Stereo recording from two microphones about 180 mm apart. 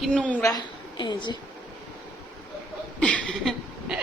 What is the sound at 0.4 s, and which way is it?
Speech, 25° left (ahead or behind).